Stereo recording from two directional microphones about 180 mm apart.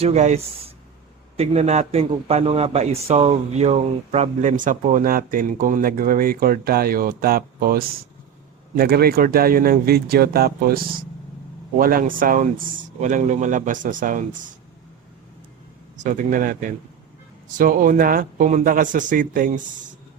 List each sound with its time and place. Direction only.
0.0 s a man's voice: 40° right (ahead or behind)
16.0 s a man's voice: 45° right (ahead or behind)